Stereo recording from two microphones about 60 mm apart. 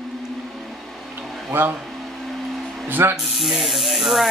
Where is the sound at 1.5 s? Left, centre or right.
Right.